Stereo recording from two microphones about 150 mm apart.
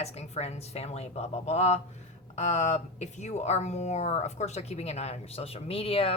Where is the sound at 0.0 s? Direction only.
45° left (ahead or behind).